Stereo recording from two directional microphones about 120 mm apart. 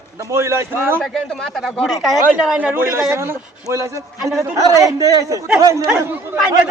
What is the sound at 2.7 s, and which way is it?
A man's voice, 20° right (ahead or behind).